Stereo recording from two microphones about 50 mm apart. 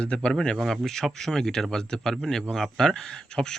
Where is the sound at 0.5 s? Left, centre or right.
Centre.